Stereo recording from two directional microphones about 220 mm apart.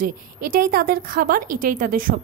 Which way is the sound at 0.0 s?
40° right (ahead or behind).